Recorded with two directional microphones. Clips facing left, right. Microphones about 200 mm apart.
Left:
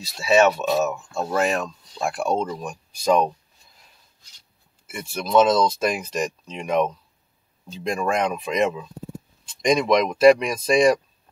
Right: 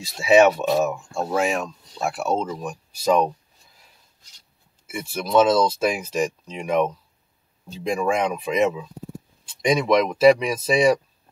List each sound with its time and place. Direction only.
0.2 s speech: 15° right (ahead or behind)
4.8 s speech: 5° right (ahead or behind)